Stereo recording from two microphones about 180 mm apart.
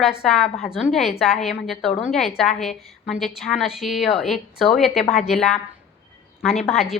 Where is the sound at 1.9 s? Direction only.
35° left (ahead or behind).